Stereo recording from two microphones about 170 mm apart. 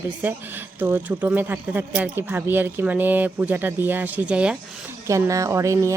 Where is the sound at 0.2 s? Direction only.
10° right (ahead or behind).